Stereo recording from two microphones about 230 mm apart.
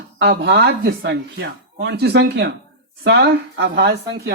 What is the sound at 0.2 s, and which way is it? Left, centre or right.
Speech, right.